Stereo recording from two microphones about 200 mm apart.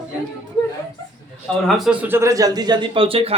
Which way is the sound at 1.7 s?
Centre (ahead or behind).